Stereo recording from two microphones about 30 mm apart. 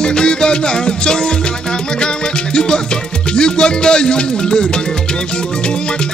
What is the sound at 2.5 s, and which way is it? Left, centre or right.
Music, left.